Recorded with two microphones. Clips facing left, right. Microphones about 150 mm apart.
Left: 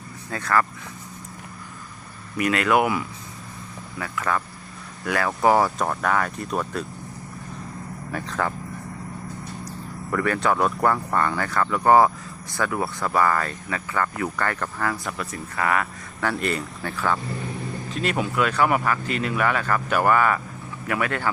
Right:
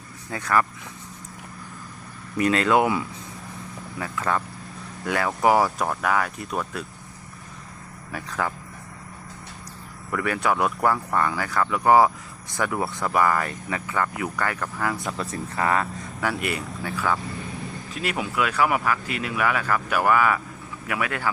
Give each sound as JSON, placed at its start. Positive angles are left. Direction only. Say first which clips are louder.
{"t": 0.3, "sound": "speech", "louder": "even", "side_deg": -15}
{"t": 2.4, "sound": "speech", "louder": "right 1 dB", "side_deg": -30}
{"t": 8.1, "sound": "speech", "louder": "left 2 dB", "side_deg": -5}
{"t": 10.1, "sound": "speech", "louder": "left 2 dB", "side_deg": -5}
{"t": 16.2, "sound": "speech", "louder": "left 2 dB", "side_deg": -10}